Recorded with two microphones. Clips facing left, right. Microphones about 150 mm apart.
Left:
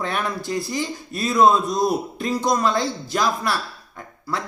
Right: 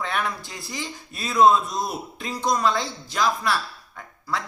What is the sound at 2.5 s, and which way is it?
Speech, 45° left (ahead or behind).